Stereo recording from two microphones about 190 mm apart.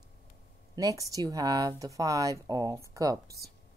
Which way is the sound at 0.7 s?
20° right (ahead or behind).